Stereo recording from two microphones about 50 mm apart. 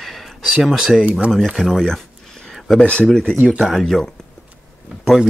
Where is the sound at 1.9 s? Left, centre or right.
Centre.